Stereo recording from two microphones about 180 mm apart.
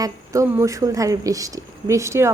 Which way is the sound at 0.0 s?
15° right (ahead or behind).